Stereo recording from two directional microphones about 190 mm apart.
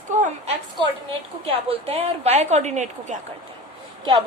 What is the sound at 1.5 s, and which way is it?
A woman's voice, 30° right (ahead or behind).